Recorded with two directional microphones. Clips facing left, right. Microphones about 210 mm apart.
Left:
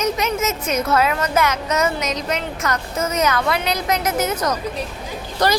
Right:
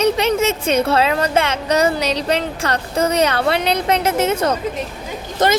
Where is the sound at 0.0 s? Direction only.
30° right (ahead or behind).